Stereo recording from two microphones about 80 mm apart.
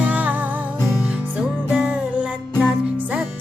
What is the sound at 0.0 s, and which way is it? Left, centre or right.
Music, centre.